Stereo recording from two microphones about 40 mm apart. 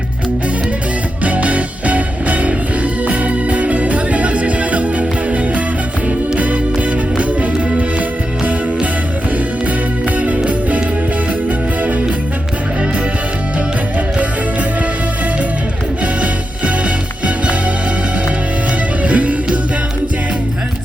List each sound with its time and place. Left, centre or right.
1.2 s music: right
7.5 s music: right
10.2 s music: right
14.2 s music: right
16.2 s music: right
19.0 s music: right